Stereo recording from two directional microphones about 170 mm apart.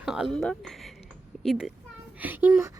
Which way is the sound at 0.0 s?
5° right (ahead or behind).